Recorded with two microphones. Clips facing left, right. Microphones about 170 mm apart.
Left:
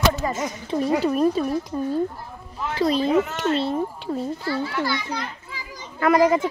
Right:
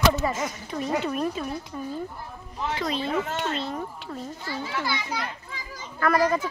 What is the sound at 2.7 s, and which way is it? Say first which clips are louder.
Speech: left 8 dB; 35° left (ahead or behind).